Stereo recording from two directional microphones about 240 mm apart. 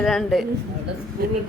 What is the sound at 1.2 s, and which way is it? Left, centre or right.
Speech, right.